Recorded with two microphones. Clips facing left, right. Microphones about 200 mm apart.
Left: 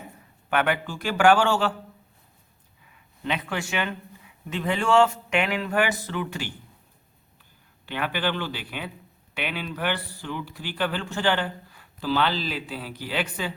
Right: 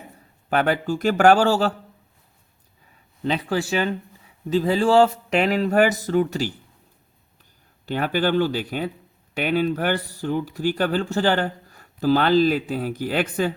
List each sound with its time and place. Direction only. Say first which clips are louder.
0.5 s speech: right 4 dB; 40° right (ahead or behind)
2.9 s speech: right 5 dB; 35° right (ahead or behind)
7.9 s speech: right 6 dB; 40° right (ahead or behind)